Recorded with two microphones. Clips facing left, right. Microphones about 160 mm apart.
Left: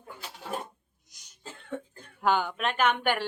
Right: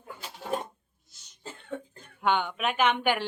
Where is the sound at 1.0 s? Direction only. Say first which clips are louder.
Even; 15° left (ahead or behind).